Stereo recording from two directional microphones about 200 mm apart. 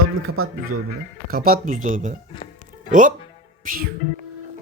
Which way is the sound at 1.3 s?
45° right (ahead or behind).